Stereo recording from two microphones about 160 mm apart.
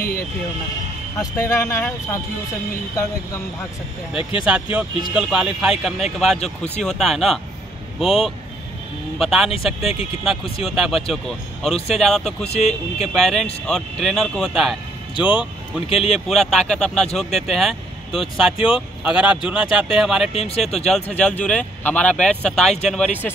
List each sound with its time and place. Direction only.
1.1 s speech: 20° left (ahead or behind)
4.2 s speech: 35° left (ahead or behind)
4.5 s speech: 5° right (ahead or behind)
12.5 s speech: 45° left (ahead or behind)
13.1 s speech: centre (ahead or behind)
20.3 s speech: 40° left (ahead or behind)
20.6 s speech: 5° left (ahead or behind)